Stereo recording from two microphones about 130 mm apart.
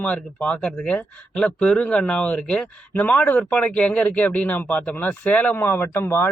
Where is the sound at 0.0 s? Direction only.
10° left (ahead or behind).